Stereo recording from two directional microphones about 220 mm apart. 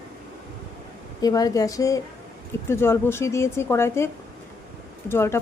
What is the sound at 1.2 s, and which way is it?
Speech, 15° left (ahead or behind).